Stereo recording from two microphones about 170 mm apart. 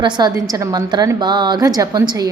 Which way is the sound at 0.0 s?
25° right (ahead or behind).